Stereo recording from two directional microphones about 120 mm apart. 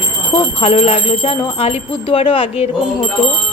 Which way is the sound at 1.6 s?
55° left (ahead or behind).